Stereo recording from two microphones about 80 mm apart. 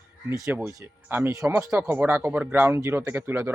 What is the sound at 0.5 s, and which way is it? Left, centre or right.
Speech, right.